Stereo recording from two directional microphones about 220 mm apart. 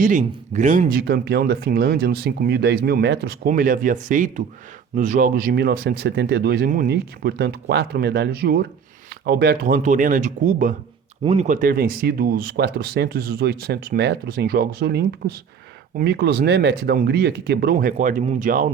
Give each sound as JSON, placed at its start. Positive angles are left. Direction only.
{"t": 0.0, "sound": "speech", "side_deg": -35}